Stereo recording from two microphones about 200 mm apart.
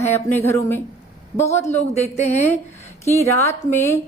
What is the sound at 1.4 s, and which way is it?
Speech, 35° left (ahead or behind).